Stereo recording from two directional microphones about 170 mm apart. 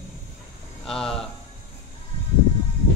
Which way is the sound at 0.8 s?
5° left (ahead or behind).